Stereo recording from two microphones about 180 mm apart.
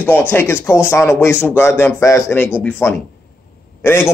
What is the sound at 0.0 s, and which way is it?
A man's voice, 10° left (ahead or behind).